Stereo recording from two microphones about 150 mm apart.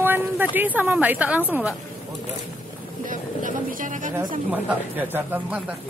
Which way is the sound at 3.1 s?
60° right (ahead or behind).